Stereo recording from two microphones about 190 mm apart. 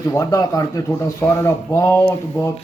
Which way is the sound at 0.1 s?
15° left (ahead or behind).